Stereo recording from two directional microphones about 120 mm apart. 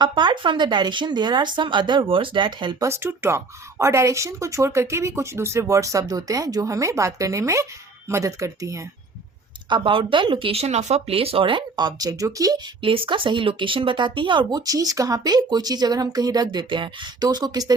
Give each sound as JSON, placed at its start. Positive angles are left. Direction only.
{"t": 0.0, "sound": "speech", "side_deg": -40}
{"t": 2.8, "sound": "speech", "side_deg": -20}
{"t": 9.6, "sound": "speech", "side_deg": -45}
{"t": 12.8, "sound": "speech", "side_deg": -45}
{"t": 14.7, "sound": "speech", "side_deg": -30}